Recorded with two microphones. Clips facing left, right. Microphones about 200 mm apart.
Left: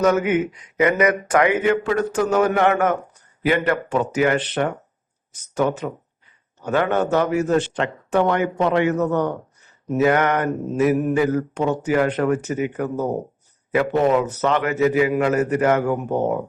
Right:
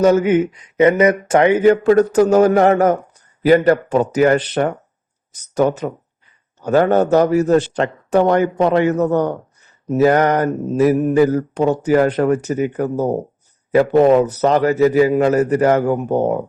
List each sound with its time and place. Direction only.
0.0 s speech: 30° right (ahead or behind)